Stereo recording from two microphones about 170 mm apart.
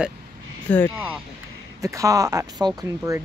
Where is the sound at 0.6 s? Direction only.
10° left (ahead or behind).